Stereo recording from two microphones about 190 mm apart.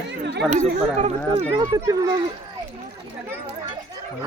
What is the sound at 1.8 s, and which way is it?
Speech, 15° right (ahead or behind).